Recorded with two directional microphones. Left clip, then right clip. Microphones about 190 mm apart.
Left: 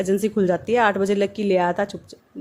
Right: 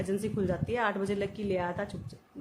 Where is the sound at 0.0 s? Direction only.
40° left (ahead or behind).